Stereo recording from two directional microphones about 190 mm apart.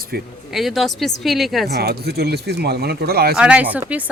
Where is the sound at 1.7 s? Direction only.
60° right (ahead or behind).